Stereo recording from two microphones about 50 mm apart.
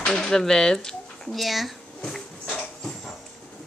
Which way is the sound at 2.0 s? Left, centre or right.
Centre.